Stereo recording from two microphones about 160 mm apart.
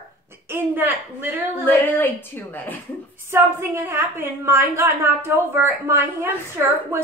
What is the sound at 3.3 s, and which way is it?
A woman's voice, 15° right (ahead or behind).